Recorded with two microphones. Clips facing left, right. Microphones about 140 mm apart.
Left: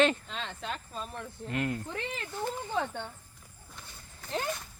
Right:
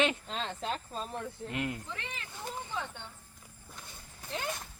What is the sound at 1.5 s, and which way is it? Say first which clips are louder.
Speech: left 5 dB; 15° right (ahead or behind).